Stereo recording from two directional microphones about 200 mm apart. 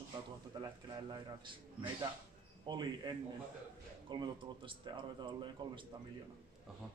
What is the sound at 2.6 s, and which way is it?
A man's voice, 20° right (ahead or behind).